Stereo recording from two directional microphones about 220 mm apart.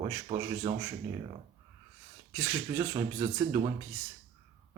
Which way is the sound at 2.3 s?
10° right (ahead or behind).